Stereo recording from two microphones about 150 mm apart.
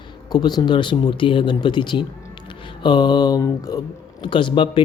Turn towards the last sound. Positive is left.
turn(degrees=35)  # may be behind; listen again after turning